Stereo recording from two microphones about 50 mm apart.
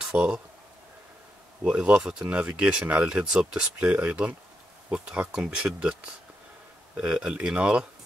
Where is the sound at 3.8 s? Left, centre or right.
Right.